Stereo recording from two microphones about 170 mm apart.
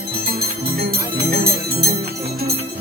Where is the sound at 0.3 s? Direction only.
65° right (ahead or behind).